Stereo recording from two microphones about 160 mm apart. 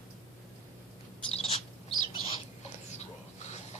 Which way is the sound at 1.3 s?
40° left (ahead or behind).